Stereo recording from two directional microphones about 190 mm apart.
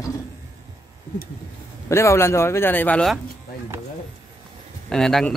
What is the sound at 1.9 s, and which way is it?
Speech, 15° left (ahead or behind).